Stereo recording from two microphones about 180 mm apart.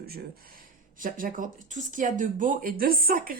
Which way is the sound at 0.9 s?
50° right (ahead or behind).